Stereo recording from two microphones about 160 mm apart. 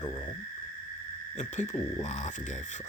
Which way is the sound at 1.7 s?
45° left (ahead or behind).